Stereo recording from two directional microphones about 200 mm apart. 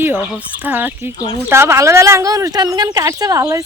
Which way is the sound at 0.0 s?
10° right (ahead or behind).